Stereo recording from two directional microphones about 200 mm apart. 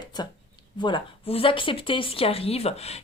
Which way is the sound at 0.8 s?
25° left (ahead or behind).